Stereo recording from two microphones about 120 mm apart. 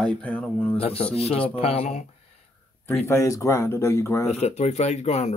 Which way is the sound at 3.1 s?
25° left (ahead or behind).